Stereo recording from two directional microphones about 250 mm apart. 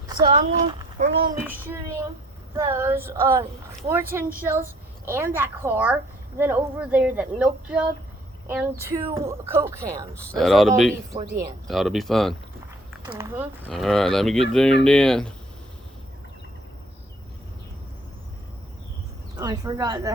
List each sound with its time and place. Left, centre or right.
0.2 s a woman's voice: right
1.5 s a woman's voice: centre
10.3 s speech: centre
19.4 s a woman's voice: centre